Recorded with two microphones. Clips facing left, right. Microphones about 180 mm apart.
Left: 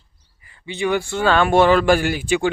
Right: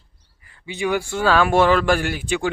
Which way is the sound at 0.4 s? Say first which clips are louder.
Left 1 dB; centre (ahead or behind).